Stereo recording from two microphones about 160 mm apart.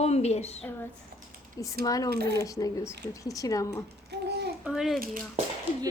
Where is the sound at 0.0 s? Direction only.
40° left (ahead or behind).